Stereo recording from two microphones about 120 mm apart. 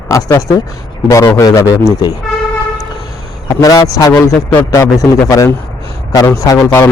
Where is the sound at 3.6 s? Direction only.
30° left (ahead or behind).